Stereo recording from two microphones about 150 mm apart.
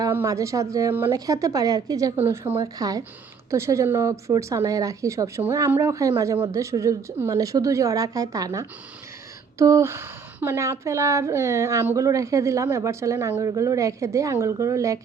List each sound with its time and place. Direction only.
0.0 s a woman's voice: 20° right (ahead or behind)